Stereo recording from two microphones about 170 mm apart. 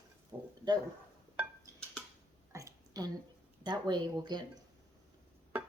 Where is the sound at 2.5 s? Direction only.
20° right (ahead or behind).